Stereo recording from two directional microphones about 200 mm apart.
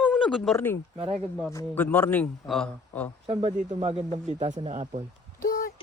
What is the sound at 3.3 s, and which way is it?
Speech, 30° right (ahead or behind).